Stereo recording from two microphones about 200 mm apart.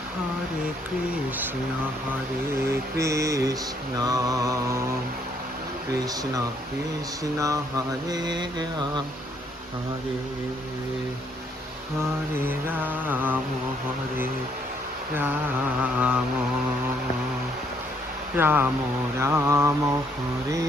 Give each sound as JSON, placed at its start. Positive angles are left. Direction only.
{"t": 3.0, "sound": "mantra", "side_deg": -15}
{"t": 7.3, "sound": "mantra", "side_deg": -15}
{"t": 12.5, "sound": "mantra", "side_deg": -10}
{"t": 15.1, "sound": "mantra", "side_deg": -10}
{"t": 18.3, "sound": "mantra", "side_deg": -10}